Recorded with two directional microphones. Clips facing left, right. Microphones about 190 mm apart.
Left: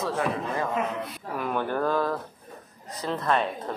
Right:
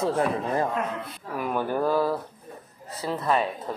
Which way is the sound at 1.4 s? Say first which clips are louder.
Right 1 dB; 10° right (ahead or behind).